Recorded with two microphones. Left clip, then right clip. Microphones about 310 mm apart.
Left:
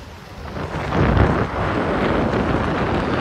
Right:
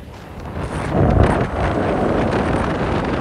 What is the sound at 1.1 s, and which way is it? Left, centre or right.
Vehicle, right.